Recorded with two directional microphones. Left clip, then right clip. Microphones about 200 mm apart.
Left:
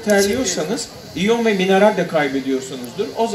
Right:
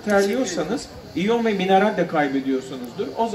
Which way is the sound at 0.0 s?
20° left (ahead or behind).